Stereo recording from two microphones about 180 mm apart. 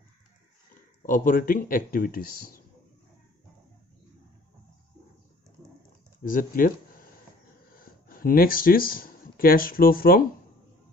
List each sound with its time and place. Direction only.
1.0 s speech: 50° left (ahead or behind)
6.2 s speech: 50° left (ahead or behind)